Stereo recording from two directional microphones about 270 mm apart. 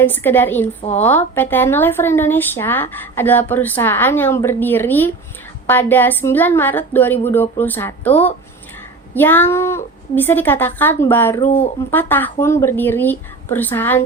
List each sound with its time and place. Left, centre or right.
0.0 s speech: centre
0.8 s speech: left
1.0 s speech: centre
9.1 s speech: centre
11.4 s speech: left
11.9 s speech: centre